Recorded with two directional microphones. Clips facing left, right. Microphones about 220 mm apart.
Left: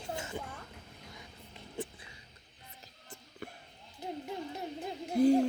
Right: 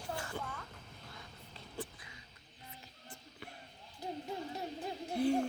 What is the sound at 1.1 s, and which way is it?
Vehicle, 15° left (ahead or behind).